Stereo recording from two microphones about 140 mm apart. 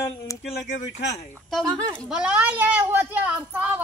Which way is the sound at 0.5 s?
60° left (ahead or behind).